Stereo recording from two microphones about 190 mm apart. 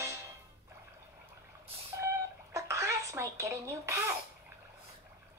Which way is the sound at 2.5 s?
15° right (ahead or behind).